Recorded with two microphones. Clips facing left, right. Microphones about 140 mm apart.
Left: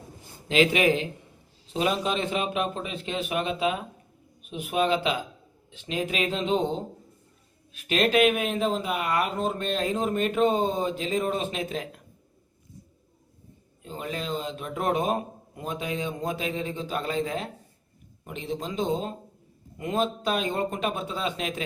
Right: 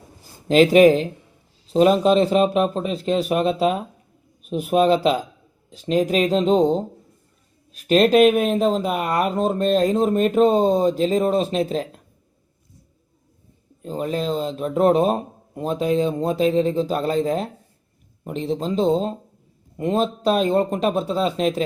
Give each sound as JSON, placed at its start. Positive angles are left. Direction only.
{"t": 0.4, "sound": "speech", "side_deg": -40}
{"t": 13.8, "sound": "speech", "side_deg": -35}